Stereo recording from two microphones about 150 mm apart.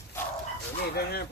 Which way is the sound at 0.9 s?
90° left.